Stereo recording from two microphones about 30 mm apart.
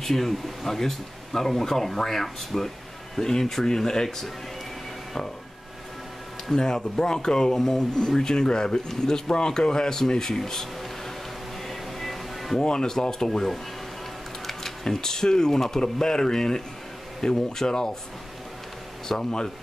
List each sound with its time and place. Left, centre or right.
0.0 s speech: centre
6.5 s speech: left
7.5 s speech: centre
8.1 s speech: left
11.6 s music: centre
12.5 s speech: left
14.4 s camera: centre
14.9 s speech: centre
19.0 s speech: left